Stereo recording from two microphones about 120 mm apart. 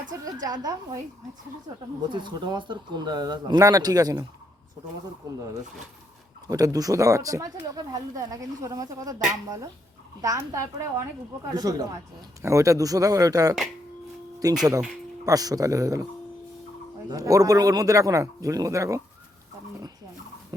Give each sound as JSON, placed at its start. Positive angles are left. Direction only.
{"t": 0.1, "sound": "speech", "side_deg": -25}
{"t": 2.0, "sound": "speech", "side_deg": -40}
{"t": 6.5, "sound": "speech", "side_deg": -30}
{"t": 17.1, "sound": "speech", "side_deg": -30}
{"t": 20.5, "sound": "a sound", "side_deg": -25}